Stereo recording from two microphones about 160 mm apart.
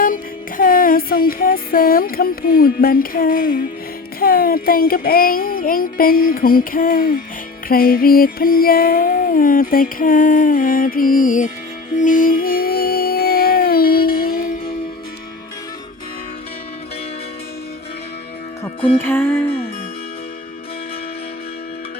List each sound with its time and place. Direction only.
0.0 s music: 60° left (ahead or behind)
18.9 s music: 15° left (ahead or behind)